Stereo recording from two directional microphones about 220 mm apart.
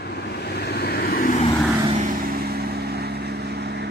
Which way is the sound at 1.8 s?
35° right (ahead or behind).